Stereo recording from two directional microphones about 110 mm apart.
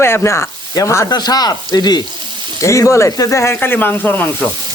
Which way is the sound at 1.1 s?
40° left (ahead or behind).